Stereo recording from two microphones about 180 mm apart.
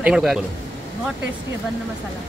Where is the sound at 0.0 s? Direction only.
5° right (ahead or behind).